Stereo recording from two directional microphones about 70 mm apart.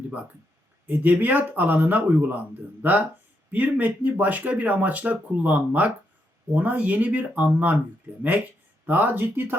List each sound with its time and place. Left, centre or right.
0.9 s speech: right